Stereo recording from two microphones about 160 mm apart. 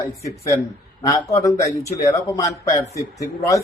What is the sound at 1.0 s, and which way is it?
A man's voice, 20° left (ahead or behind).